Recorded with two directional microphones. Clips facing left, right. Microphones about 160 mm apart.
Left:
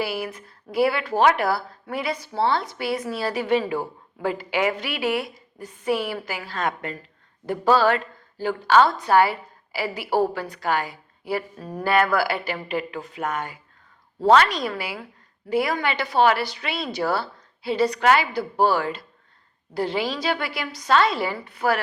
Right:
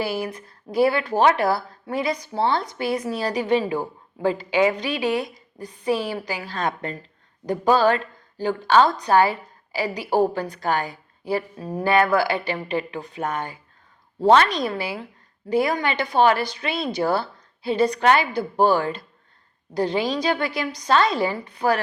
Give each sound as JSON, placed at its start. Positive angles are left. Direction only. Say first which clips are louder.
{"t": 0.7, "sound": "a woman's voice", "louder": "right 2 dB", "side_deg": -25}
{"t": 7.4, "sound": "a woman's voice", "louder": "right 1 dB", "side_deg": -15}